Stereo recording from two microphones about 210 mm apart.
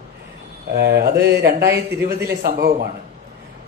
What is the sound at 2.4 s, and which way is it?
Speech, 45° right (ahead or behind).